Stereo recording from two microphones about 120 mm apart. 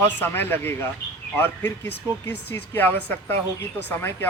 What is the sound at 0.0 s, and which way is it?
A man's voice, 20° left (ahead or behind).